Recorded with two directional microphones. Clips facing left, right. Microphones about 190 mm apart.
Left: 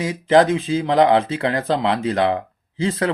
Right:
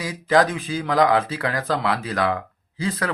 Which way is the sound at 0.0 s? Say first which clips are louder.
Left 4 dB; 25° left (ahead or behind).